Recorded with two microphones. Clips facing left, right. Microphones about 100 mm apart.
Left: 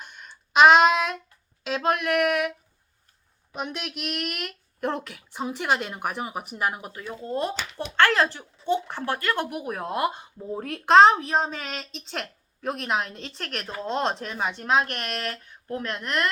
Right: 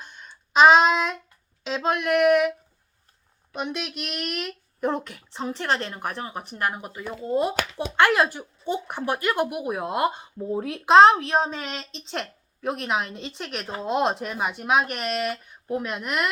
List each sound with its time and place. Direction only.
0.0 s a sound: 5° left (ahead or behind)
1.6 s speech: 5° left (ahead or behind)
3.5 s speech: centre (ahead or behind); by 10.4 s 15° right (ahead or behind)
10.5 s speech: 5° right (ahead or behind)